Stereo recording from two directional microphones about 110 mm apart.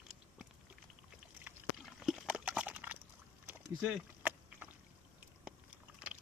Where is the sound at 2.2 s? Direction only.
10° right (ahead or behind).